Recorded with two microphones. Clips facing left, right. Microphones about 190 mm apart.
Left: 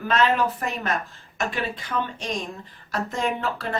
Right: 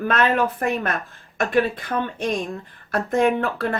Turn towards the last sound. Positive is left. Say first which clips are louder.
# right 6 dB
turn(degrees=-55)  # may be behind; listen again after turning